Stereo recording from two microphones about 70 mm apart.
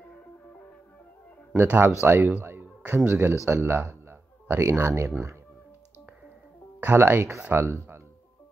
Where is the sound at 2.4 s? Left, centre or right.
Right.